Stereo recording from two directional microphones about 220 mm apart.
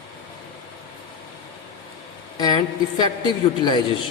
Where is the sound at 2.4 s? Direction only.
20° left (ahead or behind).